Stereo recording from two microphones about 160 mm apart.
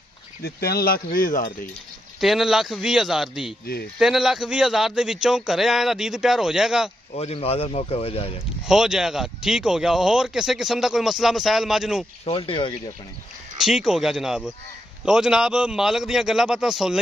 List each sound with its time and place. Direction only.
0.4 s speech: 75° left (ahead or behind)
2.1 s speech: centre (ahead or behind)
7.2 s speech: 40° left (ahead or behind)
8.6 s speech: 5° right (ahead or behind)
12.3 s speech: 35° left (ahead or behind)
13.6 s speech: centre (ahead or behind)